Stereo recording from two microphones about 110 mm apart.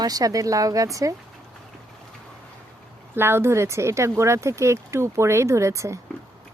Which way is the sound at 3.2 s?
20° right (ahead or behind).